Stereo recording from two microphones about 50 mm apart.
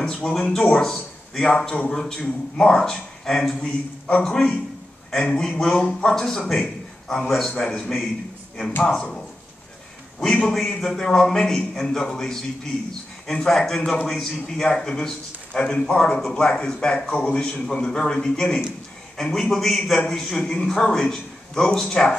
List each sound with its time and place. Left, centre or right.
0.0 s speech: centre
0.5 s speech: centre
1.5 s a man's voice: centre
10.8 s a man's voice: centre